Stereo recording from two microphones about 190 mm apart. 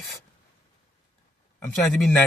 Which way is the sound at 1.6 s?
10° left (ahead or behind).